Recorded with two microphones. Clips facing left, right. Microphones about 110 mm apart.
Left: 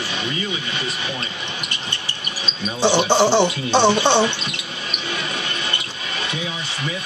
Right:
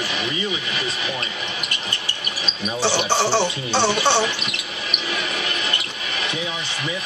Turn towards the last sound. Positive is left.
turn(degrees=25)  # may be behind; listen again after turning